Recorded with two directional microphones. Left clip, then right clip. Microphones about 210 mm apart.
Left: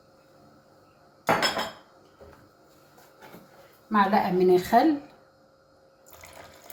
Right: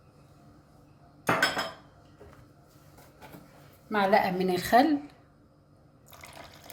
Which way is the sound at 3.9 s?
45° right (ahead or behind).